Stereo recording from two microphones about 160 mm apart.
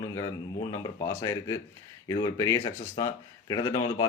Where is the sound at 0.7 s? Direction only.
20° left (ahead or behind).